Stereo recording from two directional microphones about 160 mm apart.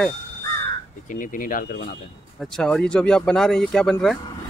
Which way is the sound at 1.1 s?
55° left (ahead or behind).